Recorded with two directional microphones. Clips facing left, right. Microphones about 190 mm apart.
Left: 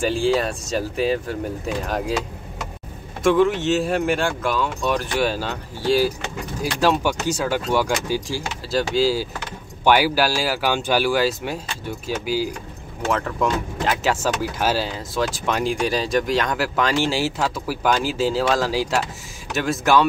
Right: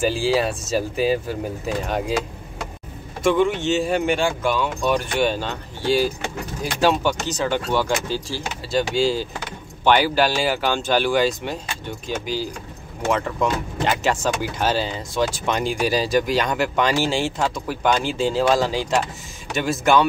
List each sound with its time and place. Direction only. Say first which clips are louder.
0.0 s speech: even; 5° right (ahead or behind)
3.3 s speech: left 1 dB; centre (ahead or behind)
7.0 s speech: even; 10° left (ahead or behind)
8.6 s speech: even; centre (ahead or behind)